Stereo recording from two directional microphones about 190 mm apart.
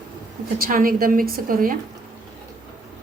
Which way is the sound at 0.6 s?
45° right (ahead or behind).